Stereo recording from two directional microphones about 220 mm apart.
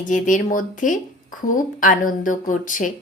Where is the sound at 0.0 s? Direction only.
35° left (ahead or behind).